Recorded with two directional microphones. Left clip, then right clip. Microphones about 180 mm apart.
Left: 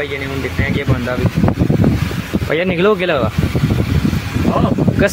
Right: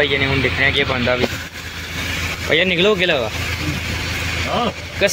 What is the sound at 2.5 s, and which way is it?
Speech, 25° left (ahead or behind).